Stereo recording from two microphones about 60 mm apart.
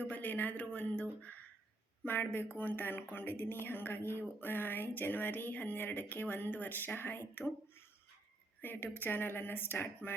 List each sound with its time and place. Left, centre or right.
0.0 s a sound: left
2.0 s a woman's voice: left
8.6 s a woman's voice: left